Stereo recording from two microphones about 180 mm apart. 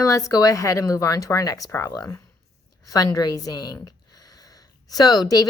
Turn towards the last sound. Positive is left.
turn(degrees=20)  # may be behind; listen again after turning